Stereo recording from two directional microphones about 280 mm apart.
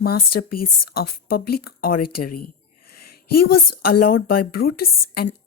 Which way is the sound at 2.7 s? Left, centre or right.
Left.